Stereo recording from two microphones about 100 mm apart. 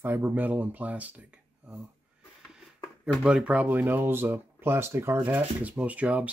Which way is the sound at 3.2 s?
10° right (ahead or behind).